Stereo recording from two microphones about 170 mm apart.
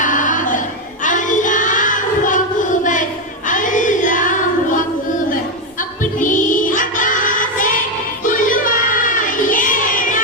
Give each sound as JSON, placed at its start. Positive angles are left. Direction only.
{"t": 0.0, "sound": "choir", "side_deg": 50}
{"t": 1.0, "sound": "child singing", "side_deg": 50}
{"t": 6.0, "sound": "music", "side_deg": 50}
{"t": 8.2, "sound": "child singing", "side_deg": 50}